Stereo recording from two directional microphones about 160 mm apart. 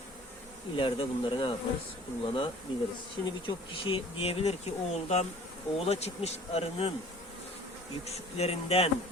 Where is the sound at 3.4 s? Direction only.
30° left (ahead or behind).